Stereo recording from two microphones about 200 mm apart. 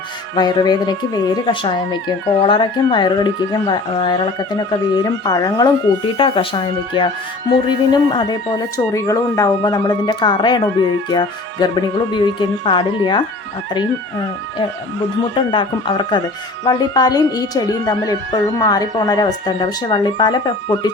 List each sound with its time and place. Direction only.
0.3 s speech: 20° left (ahead or behind)
15.5 s speech: 25° left (ahead or behind)